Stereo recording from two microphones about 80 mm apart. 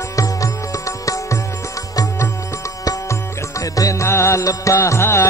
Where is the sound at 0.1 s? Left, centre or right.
Left.